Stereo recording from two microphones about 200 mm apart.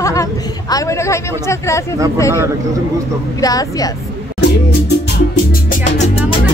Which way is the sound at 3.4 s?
20° left (ahead or behind).